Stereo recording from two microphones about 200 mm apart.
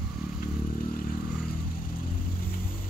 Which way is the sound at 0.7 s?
45° left (ahead or behind).